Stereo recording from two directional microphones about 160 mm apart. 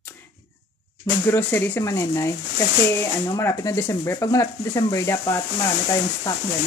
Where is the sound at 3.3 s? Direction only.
20° left (ahead or behind).